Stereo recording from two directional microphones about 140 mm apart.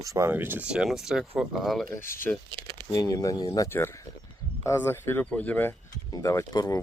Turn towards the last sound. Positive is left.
turn(degrees=25)  # may be behind; listen again after turning